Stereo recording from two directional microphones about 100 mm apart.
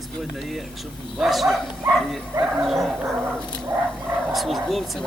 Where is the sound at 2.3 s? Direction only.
25° right (ahead or behind).